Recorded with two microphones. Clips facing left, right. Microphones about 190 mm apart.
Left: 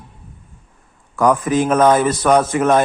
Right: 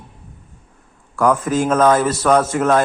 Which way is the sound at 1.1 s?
15° left (ahead or behind).